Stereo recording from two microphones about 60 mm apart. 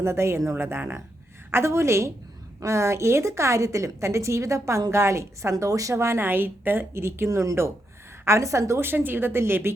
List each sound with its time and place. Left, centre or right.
0.0 s a woman's voice: right
0.5 s a woman's voice: right
5.9 s a woman's voice: right
7.3 s speech: right
8.2 s a woman's voice: right
8.8 s a woman's voice: right